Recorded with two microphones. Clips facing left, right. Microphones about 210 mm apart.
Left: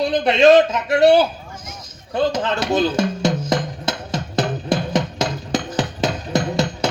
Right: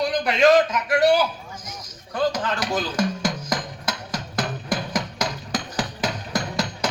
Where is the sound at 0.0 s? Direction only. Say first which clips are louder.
Left 5 dB; 25° left (ahead or behind).